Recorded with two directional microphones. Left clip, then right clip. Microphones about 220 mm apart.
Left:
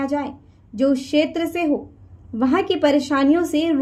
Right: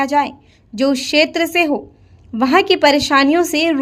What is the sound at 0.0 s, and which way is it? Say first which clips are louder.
A woman's voice: right 8 dB; 45° right (ahead or behind).